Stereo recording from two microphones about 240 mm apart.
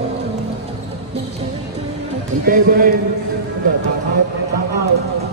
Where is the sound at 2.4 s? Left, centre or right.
Right.